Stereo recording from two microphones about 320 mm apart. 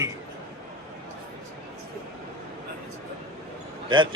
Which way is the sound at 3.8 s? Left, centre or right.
Centre.